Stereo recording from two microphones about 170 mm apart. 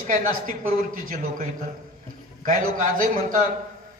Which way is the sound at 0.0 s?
50° right (ahead or behind).